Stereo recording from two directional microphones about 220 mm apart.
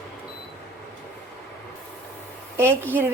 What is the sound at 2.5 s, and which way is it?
Speech, 10° right (ahead or behind).